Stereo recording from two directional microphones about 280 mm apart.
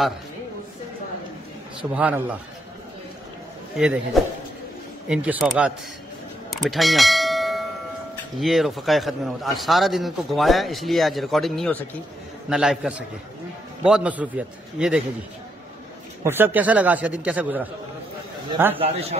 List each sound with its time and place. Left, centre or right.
1.8 s a man's voice: centre
3.7 s a man's voice: centre
6.5 s bell: centre
8.4 s a man's voice: centre
16.3 s a man's voice: centre
18.8 s a man's voice: right